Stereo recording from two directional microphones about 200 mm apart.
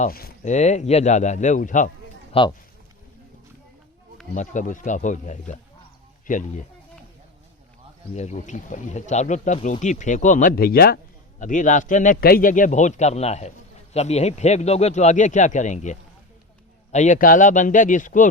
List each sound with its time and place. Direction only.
0.0 s speech: 50° left (ahead or behind)
2.3 s speech: 25° left (ahead or behind)
4.4 s speech: 40° left (ahead or behind)
8.1 s speech: 35° left (ahead or behind)